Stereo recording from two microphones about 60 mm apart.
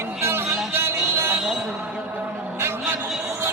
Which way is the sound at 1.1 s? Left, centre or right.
Right.